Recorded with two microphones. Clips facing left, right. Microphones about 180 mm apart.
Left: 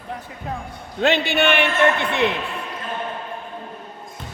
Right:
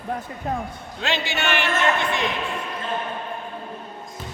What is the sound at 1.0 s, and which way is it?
A man's voice, 55° left (ahead or behind).